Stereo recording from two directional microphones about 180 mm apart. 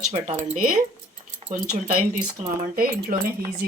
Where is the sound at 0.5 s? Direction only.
50° right (ahead or behind).